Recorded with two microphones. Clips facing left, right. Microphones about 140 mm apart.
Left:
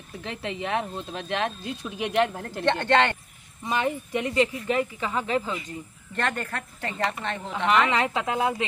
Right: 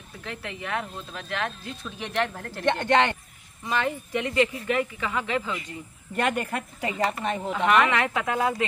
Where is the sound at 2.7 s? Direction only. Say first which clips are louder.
Even; 15° right (ahead or behind).